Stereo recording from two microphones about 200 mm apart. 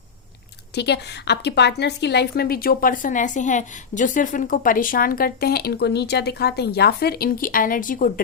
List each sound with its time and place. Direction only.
0.8 s a woman's voice: 55° left (ahead or behind)